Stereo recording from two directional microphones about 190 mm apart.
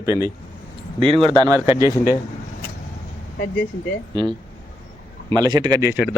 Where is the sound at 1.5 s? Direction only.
10° right (ahead or behind).